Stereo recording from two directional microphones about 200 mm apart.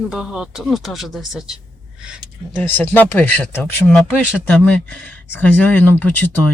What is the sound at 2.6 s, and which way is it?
Speech, 10° left (ahead or behind).